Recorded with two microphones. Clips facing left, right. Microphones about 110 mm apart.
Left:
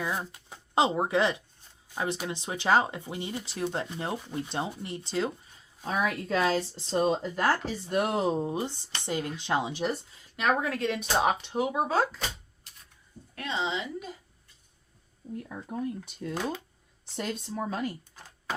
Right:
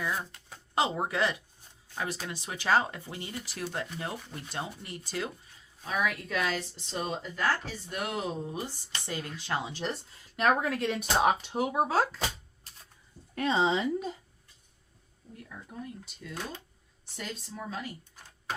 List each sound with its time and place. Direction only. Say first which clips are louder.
0.0 s speech: left 1 dB; 20° left (ahead or behind)
10.6 s speech: left 1 dB; centre (ahead or behind)
13.4 s speech: right 5 dB; 40° right (ahead or behind)
15.5 s speech: left 6 dB; 40° left (ahead or behind)
17.2 s speech: left 7 dB; 45° left (ahead or behind)